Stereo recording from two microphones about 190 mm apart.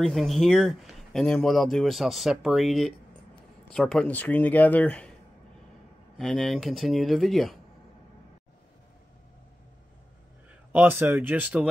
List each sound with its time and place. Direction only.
0.0 s speech: centre (ahead or behind)
6.1 s speech: centre (ahead or behind)
10.7 s speech: 10° right (ahead or behind)